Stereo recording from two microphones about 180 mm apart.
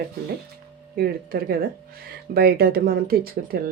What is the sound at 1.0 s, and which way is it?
Speech, 55° right (ahead or behind).